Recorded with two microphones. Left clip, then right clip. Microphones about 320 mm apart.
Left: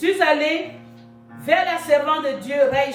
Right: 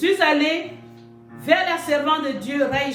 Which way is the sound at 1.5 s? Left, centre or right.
Centre.